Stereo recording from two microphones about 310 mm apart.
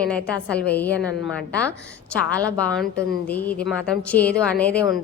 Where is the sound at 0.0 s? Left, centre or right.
Centre.